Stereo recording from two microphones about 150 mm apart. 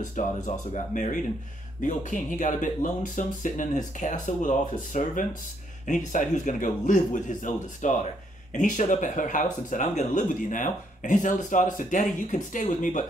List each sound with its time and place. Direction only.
0.0 s speech: 55° left (ahead or behind)